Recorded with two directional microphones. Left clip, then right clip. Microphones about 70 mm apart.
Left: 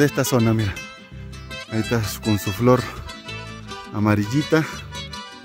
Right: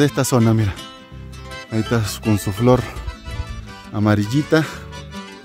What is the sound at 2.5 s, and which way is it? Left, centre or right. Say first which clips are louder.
Speech: right 1 dB; centre.